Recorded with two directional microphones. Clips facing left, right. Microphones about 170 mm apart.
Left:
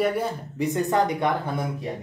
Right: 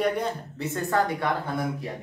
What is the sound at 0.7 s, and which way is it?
Speech, 20° left (ahead or behind).